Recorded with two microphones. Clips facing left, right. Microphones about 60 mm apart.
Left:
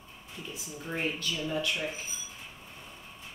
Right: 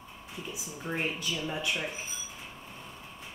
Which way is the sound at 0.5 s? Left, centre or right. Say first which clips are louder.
Right 2 dB; centre.